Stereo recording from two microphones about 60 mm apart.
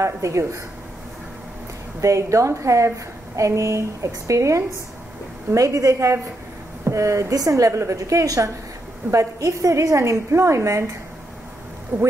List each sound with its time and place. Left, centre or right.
0.0 s a woman's voice: right
2.0 s a woman's voice: right
11.9 s speech: right